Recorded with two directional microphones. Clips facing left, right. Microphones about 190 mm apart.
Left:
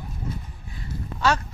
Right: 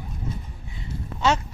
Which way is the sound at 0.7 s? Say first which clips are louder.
Even; 20° right (ahead or behind).